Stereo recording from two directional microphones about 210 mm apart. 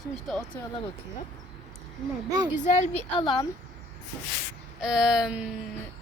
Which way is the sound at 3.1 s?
25° left (ahead or behind).